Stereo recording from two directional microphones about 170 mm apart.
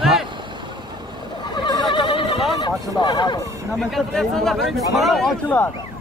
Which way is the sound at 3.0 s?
25° left (ahead or behind).